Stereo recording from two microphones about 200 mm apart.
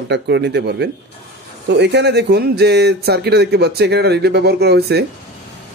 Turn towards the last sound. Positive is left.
turn(degrees=-55)  # may be behind; listen again after turning